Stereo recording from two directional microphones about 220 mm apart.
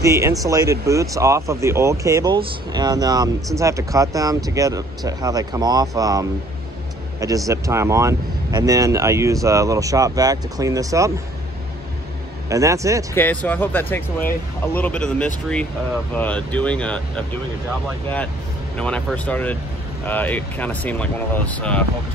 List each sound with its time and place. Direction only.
0.0 s speech: 15° right (ahead or behind)
12.4 s speech: 15° right (ahead or behind)
13.1 s speech: 10° left (ahead or behind)
18.8 s speech: 5° left (ahead or behind)